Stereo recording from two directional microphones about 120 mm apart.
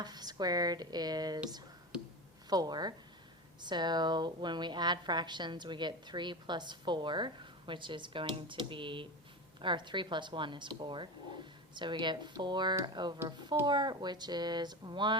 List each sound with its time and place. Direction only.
0.0 s a woman's voice: 35° right (ahead or behind)
2.5 s a woman's voice: 35° right (ahead or behind)